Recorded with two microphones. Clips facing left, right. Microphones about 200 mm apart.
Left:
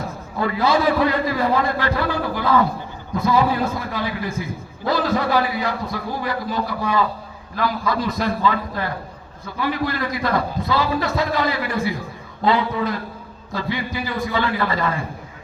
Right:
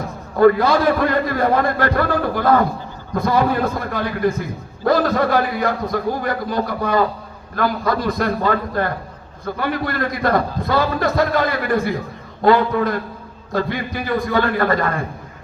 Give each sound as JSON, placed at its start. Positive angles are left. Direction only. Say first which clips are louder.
{"t": 0.3, "sound": "a man's voice", "louder": "right 6 dB", "side_deg": -50}